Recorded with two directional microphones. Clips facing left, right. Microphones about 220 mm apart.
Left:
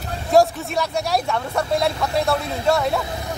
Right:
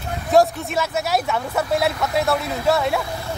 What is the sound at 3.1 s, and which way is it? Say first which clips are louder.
Speech: even; 20° left (ahead or behind).